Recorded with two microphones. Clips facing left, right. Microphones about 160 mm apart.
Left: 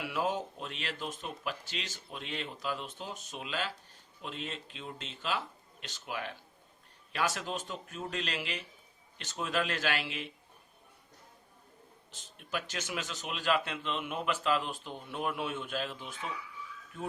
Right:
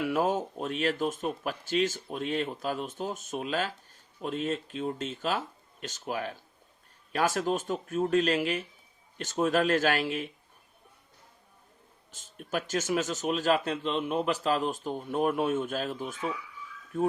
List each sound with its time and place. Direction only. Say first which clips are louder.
0.0 s speech: right 6 dB; 45° right (ahead or behind)
12.1 s speech: right 5 dB; 45° right (ahead or behind)